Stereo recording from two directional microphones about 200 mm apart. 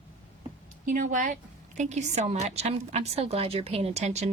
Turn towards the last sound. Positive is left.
turn(degrees=-35)  # may be behind; listen again after turning